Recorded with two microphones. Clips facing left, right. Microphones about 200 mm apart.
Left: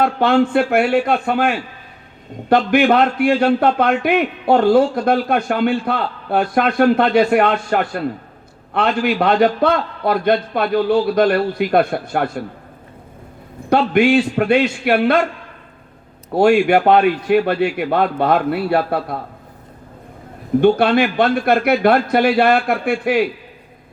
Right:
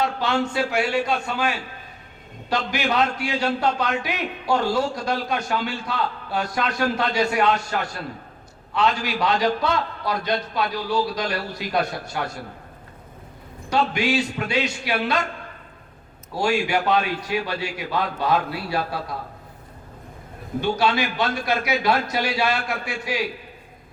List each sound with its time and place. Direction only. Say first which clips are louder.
0.0 s a man's voice: left 8 dB; 55° left (ahead or behind)
13.7 s a man's voice: left 8 dB; 55° left (ahead or behind)
16.3 s a man's voice: left 10 dB; 55° left (ahead or behind)
20.6 s a man's voice: left 9 dB; 55° left (ahead or behind)